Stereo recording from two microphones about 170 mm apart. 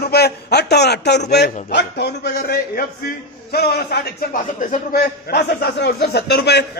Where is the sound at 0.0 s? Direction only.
70° left (ahead or behind).